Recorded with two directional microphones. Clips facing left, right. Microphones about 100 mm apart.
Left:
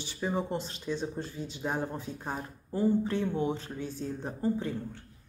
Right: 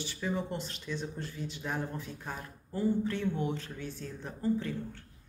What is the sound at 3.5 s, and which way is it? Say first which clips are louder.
Speech: left 3 dB; 35° left (ahead or behind).